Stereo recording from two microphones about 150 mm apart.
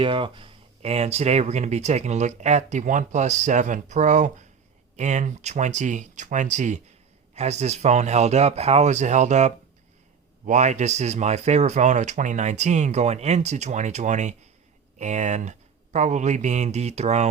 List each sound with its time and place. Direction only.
0.0 s speech: 35° right (ahead or behind)